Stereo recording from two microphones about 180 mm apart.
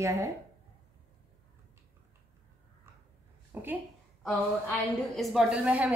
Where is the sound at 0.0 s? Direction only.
15° right (ahead or behind).